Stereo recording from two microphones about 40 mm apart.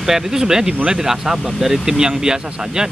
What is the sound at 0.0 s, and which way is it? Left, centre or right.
Speech, centre.